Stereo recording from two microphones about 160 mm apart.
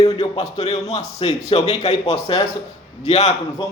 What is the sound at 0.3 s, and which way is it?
A man's voice, 40° left (ahead or behind).